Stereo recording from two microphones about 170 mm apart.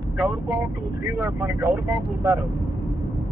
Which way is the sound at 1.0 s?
15° right (ahead or behind).